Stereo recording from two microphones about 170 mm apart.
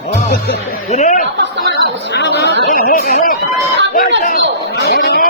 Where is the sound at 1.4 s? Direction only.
90° right.